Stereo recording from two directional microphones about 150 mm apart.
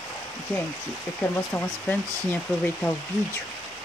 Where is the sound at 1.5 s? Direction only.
10° left (ahead or behind).